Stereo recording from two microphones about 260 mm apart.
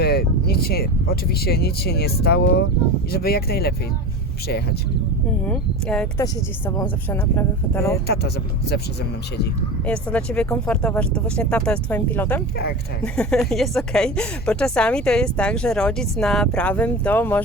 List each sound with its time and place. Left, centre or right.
0.0 s speech: left
5.5 s a woman's voice: centre
8.0 s speech: left
9.8 s a woman's voice: centre